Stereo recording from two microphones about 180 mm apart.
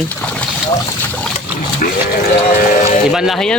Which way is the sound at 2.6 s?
50° left (ahead or behind).